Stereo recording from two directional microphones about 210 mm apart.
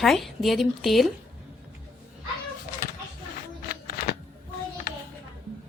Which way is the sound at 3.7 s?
45° left (ahead or behind).